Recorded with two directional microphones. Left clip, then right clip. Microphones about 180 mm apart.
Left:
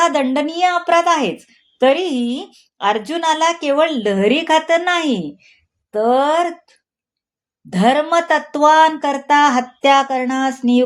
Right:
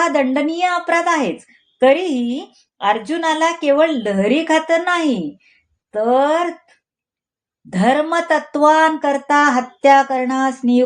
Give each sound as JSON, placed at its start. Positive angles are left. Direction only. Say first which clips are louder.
{"t": 0.0, "sound": "speech", "louder": "left 1 dB", "side_deg": 30}
{"t": 7.7, "sound": "speech", "louder": "left 1 dB", "side_deg": 35}